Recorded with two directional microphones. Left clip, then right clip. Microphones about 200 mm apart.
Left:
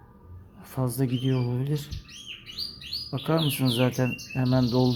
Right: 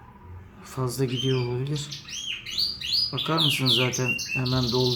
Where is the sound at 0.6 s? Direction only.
25° left (ahead or behind).